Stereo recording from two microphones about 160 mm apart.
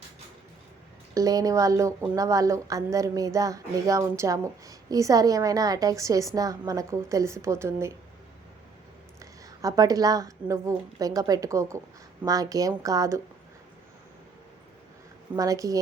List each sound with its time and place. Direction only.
1.1 s a woman's voice: 20° right (ahead or behind)
9.6 s a woman's voice: 20° right (ahead or behind)
15.4 s a woman's voice: 20° right (ahead or behind)